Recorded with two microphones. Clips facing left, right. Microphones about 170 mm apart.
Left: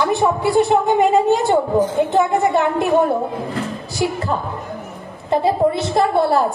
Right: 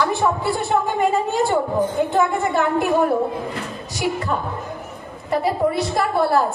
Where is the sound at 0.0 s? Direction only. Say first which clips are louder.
Left 3 dB; 20° left (ahead or behind).